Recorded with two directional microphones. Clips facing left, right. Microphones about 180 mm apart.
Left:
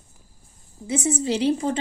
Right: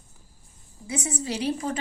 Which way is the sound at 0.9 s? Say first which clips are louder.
Left 7 dB; 25° left (ahead or behind).